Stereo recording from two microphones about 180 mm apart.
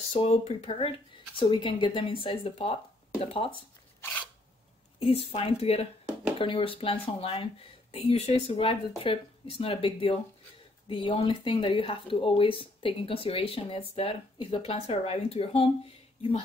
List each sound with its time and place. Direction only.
0.1 s speech: 35° left (ahead or behind)
4.9 s speech: 35° left (ahead or behind)